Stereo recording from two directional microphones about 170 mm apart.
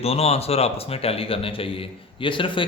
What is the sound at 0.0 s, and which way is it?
A man's voice, 35° left (ahead or behind).